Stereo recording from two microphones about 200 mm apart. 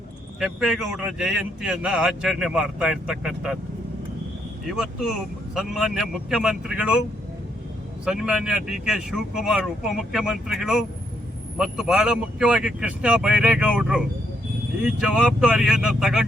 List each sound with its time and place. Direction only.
0.3 s speech: centre (ahead or behind)
4.6 s speech: centre (ahead or behind)
8.0 s speech: 5° right (ahead or behind)